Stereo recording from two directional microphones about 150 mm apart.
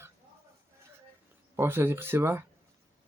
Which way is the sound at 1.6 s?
15° right (ahead or behind).